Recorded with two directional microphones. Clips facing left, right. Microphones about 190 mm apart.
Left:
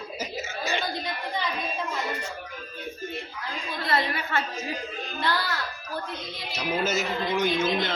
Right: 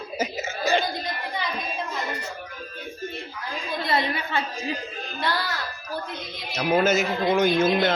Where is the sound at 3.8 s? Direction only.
15° right (ahead or behind).